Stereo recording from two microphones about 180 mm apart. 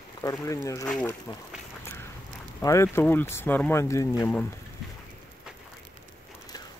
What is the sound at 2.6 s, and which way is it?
Speech, 15° left (ahead or behind).